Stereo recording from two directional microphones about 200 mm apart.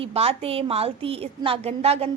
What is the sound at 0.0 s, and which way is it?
A woman's voice, 30° right (ahead or behind).